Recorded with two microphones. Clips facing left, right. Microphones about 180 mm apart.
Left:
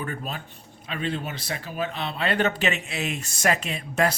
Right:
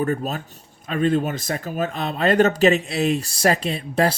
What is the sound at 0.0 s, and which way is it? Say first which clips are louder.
Speech: right 9 dB; 40° right (ahead or behind).